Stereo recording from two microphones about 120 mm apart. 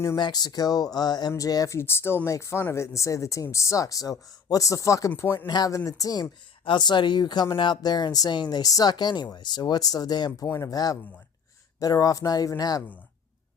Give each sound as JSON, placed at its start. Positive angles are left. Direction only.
{"t": 0.2, "sound": "speech", "side_deg": 35}
{"t": 5.5, "sound": "speech", "side_deg": 30}